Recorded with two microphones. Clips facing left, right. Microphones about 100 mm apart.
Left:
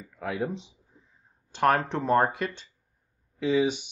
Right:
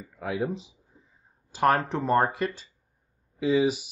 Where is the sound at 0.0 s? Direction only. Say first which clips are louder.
Right 1 dB; centre (ahead or behind).